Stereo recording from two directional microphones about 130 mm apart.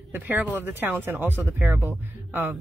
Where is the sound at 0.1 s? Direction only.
15° right (ahead or behind).